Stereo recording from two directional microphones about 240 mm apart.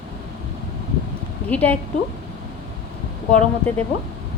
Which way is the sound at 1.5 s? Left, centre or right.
Centre.